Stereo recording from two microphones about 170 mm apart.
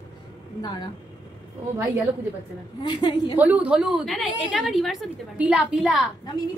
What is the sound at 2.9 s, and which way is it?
Speech, 25° left (ahead or behind).